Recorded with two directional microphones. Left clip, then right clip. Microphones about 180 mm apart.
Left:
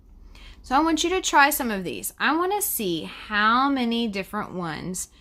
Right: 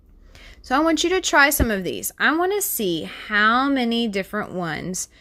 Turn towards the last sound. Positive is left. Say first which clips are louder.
# right 4 dB
turn(degrees=-30)  # may be behind; listen again after turning